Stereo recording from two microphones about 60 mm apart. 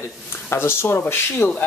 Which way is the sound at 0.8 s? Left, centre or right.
Left.